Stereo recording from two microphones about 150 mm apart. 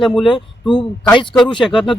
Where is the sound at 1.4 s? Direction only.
30° left (ahead or behind).